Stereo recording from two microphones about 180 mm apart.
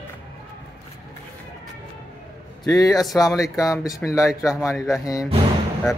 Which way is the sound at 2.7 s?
20° left (ahead or behind).